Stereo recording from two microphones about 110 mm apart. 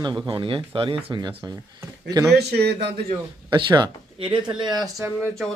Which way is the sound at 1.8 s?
30° right (ahead or behind).